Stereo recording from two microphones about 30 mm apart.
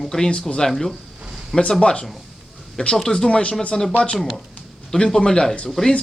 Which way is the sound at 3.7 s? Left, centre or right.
Left.